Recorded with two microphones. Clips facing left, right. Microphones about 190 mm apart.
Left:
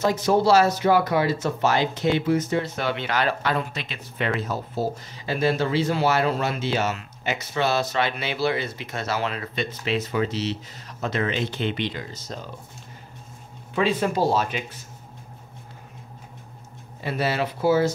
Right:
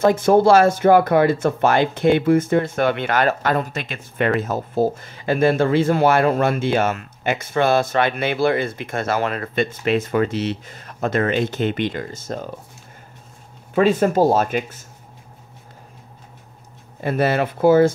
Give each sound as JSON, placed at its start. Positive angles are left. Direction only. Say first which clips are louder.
{"t": 0.0, "sound": "speech", "louder": "right 6 dB", "side_deg": -50}
{"t": 13.7, "sound": "speech", "louder": "right 6 dB", "side_deg": -45}
{"t": 17.0, "sound": "speech", "louder": "right 6 dB", "side_deg": -50}